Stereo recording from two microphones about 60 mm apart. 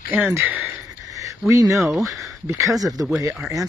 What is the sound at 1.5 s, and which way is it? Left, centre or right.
Speech, right.